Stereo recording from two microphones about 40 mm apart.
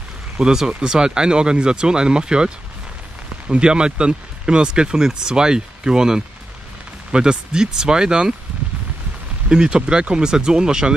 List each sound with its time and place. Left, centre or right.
0.4 s speech: centre
9.5 s speech: right